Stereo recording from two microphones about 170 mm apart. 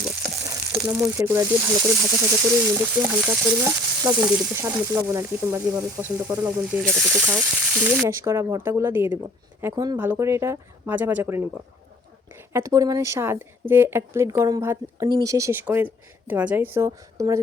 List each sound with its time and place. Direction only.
0.9 s speech: 10° right (ahead or behind)
8.1 s speech: 20° right (ahead or behind)
12.5 s speech: 20° right (ahead or behind)